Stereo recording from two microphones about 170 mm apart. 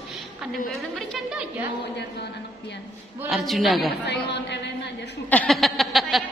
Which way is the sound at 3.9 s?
85° left.